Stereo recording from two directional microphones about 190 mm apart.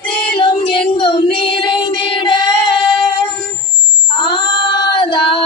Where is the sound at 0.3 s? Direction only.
25° left (ahead or behind).